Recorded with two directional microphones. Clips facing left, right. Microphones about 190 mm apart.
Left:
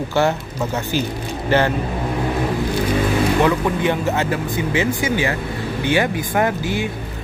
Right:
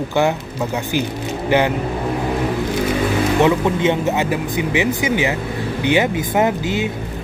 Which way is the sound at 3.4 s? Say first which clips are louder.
Right 2 dB; 20° right (ahead or behind).